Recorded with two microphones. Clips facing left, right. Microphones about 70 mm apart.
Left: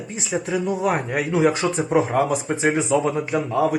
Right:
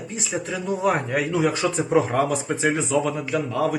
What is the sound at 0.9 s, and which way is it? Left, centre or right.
Speech, centre.